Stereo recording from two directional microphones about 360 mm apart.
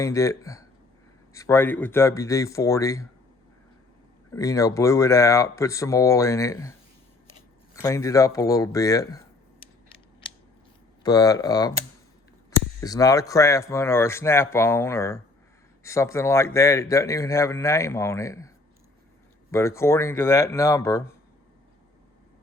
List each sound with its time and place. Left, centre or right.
0.0 s a man's voice: centre
4.4 s a man's voice: centre
7.8 s a man's voice: centre
11.0 s a man's voice: centre